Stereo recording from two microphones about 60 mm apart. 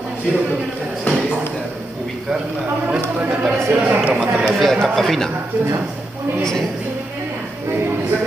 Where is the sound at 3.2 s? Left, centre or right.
Centre.